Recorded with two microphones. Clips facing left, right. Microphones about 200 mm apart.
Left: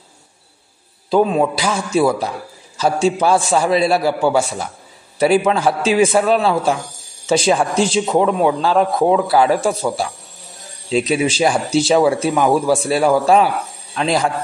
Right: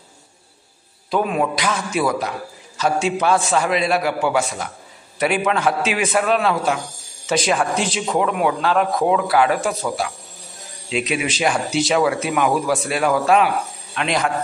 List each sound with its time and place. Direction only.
1.1 s a man's voice: 25° left (ahead or behind)